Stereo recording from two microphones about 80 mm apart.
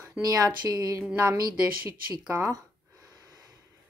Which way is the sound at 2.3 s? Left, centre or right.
Right.